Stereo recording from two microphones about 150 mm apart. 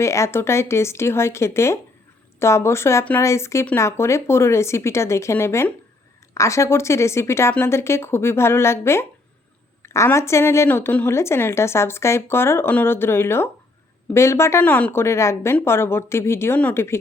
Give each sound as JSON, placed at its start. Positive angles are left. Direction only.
{"t": 0.0, "sound": "a woman's voice", "side_deg": 20}